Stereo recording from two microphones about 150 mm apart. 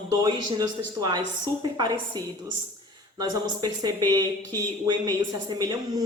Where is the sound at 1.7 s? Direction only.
25° right (ahead or behind).